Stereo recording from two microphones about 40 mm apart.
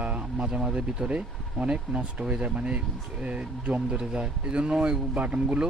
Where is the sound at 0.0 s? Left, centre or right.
Right.